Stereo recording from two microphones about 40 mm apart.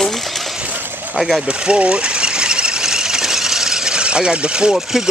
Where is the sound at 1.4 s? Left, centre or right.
Right.